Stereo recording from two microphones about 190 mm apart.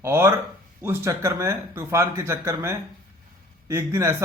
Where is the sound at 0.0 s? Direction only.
15° right (ahead or behind).